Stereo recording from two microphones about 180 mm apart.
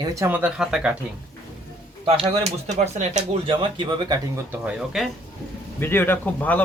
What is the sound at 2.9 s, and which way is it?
Speech, 40° right (ahead or behind).